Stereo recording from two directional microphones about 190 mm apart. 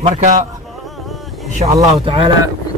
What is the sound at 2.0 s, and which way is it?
Speech, 25° right (ahead or behind).